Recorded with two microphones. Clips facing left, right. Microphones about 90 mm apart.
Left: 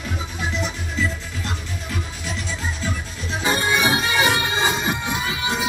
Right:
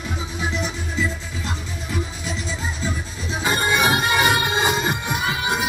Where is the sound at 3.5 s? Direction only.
50° right (ahead or behind).